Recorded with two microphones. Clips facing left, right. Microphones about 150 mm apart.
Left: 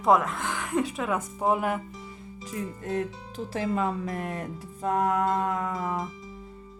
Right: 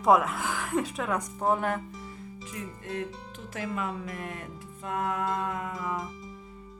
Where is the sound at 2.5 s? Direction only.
35° left (ahead or behind).